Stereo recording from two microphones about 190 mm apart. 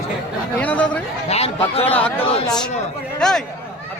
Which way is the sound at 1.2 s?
35° left (ahead or behind).